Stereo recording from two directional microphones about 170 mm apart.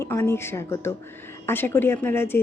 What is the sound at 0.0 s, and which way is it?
Speech, 15° left (ahead or behind).